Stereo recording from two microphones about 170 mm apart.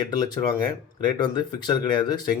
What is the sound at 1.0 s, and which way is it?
A man's voice, 25° left (ahead or behind).